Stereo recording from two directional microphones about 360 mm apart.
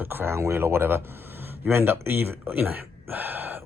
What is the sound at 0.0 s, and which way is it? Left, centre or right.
Speech, centre.